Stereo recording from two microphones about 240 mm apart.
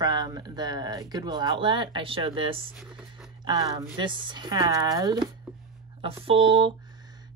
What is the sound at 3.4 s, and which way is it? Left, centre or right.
Speech, centre.